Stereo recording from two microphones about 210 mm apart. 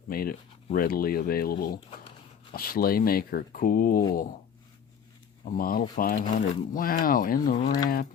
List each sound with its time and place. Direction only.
0.1 s speech: 45° left (ahead or behind)
5.5 s speech: 45° left (ahead or behind)